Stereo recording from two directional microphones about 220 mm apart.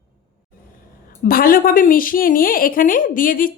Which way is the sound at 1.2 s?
40° left (ahead or behind).